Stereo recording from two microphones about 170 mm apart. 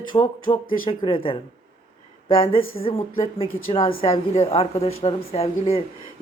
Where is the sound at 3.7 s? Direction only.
30° left (ahead or behind).